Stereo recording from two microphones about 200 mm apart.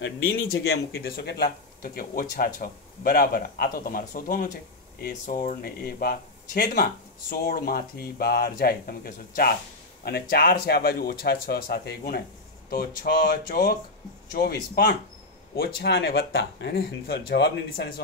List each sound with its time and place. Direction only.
0.0 s speech: 50° left (ahead or behind)